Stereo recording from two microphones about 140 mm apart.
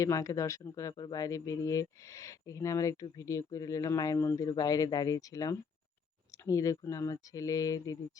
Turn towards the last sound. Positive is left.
turn(degrees=25)  # may be behind; listen again after turning